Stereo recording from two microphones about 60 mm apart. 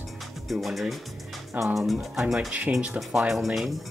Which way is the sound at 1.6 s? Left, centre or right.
Right.